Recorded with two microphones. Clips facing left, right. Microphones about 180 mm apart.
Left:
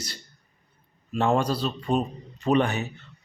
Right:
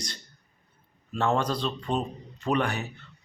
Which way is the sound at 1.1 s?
15° left (ahead or behind).